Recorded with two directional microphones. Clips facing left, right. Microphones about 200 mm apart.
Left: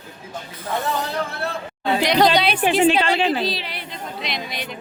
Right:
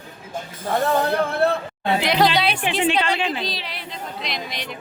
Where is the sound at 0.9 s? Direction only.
60° right (ahead or behind).